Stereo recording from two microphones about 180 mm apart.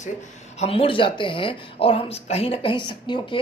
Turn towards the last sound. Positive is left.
turn(degrees=25)  # may be behind; listen again after turning